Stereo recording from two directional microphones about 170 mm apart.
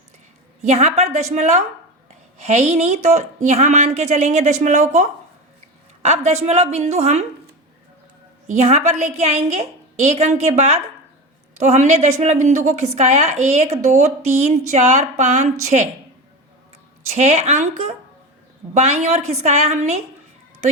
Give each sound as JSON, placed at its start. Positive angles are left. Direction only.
{"t": 0.7, "sound": "speech", "side_deg": -40}
{"t": 8.4, "sound": "speech", "side_deg": -40}
{"t": 17.1, "sound": "speech", "side_deg": -40}